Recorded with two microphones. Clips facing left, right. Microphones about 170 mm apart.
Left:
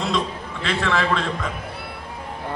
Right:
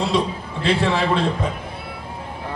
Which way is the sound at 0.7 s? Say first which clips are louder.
Right 3 dB; 30° right (ahead or behind).